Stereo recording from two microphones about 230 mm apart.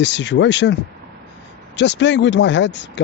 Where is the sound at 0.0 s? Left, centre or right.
Left.